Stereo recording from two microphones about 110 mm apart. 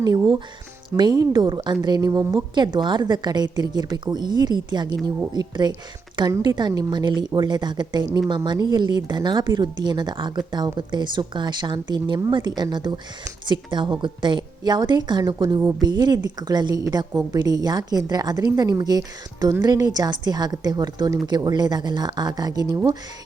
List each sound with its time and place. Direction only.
0.0 s a woman's voice: 40° right (ahead or behind)